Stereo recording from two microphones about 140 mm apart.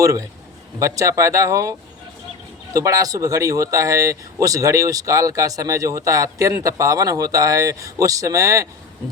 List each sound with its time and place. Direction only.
0.0 s speech: 25° right (ahead or behind)
2.7 s speech: 20° right (ahead or behind)